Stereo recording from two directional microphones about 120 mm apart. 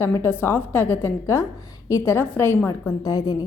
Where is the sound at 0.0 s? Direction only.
20° left (ahead or behind).